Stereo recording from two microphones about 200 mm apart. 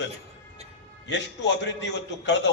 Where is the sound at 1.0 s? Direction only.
60° left (ahead or behind).